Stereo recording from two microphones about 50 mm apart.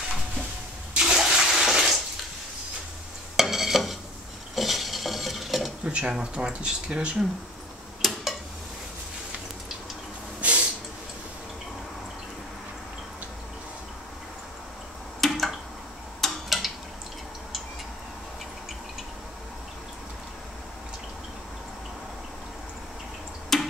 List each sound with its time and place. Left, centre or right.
0.9 s toilet flush: centre
3.3 s stir: centre
5.9 s speech: right
8.0 s tick-tock: centre
10.4 s a sound: right
15.1 s a sound: centre
16.4 s tick-tock: centre
23.5 s tick-tock: centre